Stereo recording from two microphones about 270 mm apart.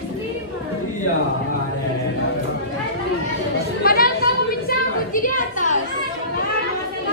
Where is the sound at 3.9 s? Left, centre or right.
Left.